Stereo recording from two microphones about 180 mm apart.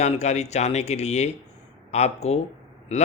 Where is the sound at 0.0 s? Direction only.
40° left (ahead or behind).